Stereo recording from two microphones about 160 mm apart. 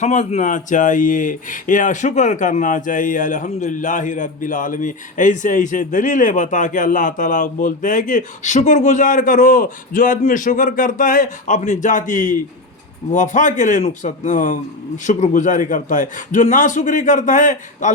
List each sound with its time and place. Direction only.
0.0 s speech: 50° left (ahead or behind)